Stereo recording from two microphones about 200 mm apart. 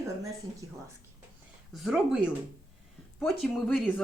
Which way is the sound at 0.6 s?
20° right (ahead or behind).